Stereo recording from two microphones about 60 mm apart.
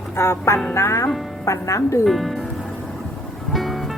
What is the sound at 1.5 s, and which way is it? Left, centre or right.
Speech, left.